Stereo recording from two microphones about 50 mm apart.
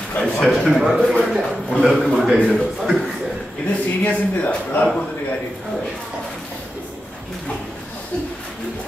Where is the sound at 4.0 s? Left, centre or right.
Left.